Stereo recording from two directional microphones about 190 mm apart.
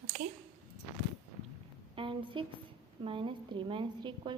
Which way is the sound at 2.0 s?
25° right (ahead or behind).